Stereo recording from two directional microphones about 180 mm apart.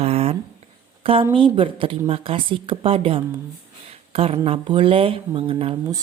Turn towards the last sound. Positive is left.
turn(degrees=-30)  # may be behind; listen again after turning